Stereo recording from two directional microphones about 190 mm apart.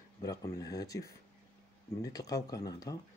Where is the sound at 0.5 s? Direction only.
20° left (ahead or behind).